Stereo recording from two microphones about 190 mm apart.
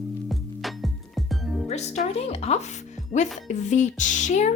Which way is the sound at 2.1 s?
35° left (ahead or behind).